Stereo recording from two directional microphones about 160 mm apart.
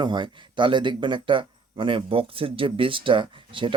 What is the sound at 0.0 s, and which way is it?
Speech, 30° right (ahead or behind).